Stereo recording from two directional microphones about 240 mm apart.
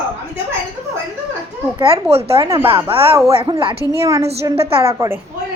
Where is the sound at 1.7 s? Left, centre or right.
Right.